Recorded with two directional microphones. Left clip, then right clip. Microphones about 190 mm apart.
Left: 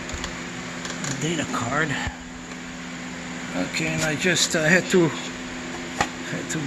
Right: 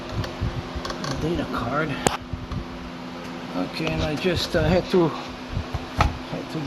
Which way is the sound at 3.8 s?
10° left (ahead or behind).